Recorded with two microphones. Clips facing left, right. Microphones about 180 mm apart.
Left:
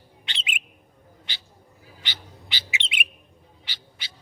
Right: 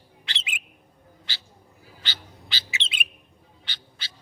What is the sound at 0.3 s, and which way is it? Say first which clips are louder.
Bird: left 1 dB; 20° left (ahead or behind).